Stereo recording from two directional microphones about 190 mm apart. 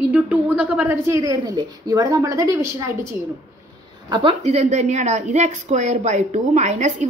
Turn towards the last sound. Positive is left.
turn(degrees=-40)  # may be behind; listen again after turning